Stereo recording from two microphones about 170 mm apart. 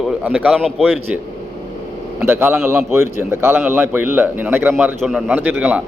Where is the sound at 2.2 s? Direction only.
15° right (ahead or behind).